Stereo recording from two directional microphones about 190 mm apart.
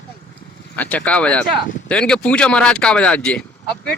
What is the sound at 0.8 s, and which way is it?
Speech, 5° left (ahead or behind).